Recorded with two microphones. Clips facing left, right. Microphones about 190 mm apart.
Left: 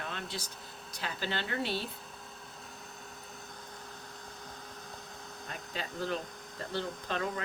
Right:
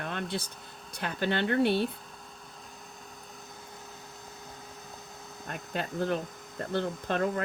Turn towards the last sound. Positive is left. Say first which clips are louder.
# right 6 dB
turn(degrees=-50)  # may be behind; listen again after turning